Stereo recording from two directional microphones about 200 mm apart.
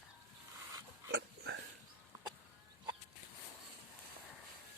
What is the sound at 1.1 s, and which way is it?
Dog, 55° right (ahead or behind).